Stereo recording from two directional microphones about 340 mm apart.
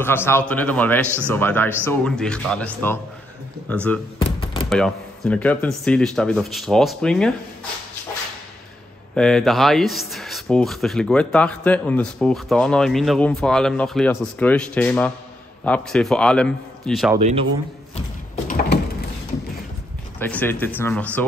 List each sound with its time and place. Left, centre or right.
0.0 s speech: centre
1.0 s speech: centre
1.3 s speech: centre
4.2 s a sound: centre
4.6 s speech: centre
9.1 s speech: centre
17.9 s a sound: centre
20.2 s speech: centre